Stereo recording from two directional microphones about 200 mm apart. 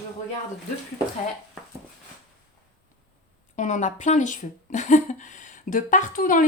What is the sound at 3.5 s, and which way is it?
Speech, 40° left (ahead or behind).